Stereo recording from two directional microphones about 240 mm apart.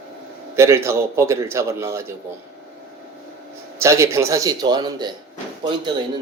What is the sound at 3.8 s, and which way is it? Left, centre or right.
A man's voice, centre.